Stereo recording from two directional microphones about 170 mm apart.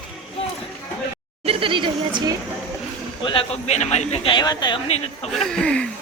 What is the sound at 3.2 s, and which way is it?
Speech, 30° left (ahead or behind).